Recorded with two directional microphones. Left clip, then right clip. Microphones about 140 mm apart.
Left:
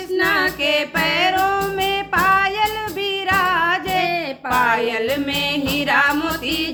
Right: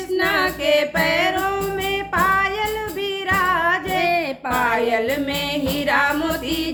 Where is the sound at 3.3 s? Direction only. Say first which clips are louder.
Left 1 dB; 30° left (ahead or behind).